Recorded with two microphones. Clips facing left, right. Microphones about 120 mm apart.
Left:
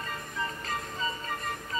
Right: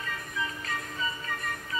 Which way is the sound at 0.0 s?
35° left (ahead or behind).